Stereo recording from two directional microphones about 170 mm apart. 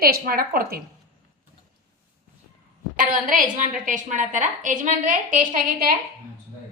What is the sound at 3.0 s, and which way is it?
A woman's voice, 50° right (ahead or behind).